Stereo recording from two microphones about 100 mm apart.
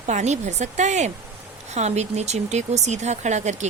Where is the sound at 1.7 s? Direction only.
90° right.